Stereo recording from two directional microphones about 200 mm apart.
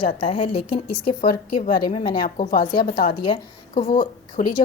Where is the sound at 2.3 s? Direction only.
40° left (ahead or behind).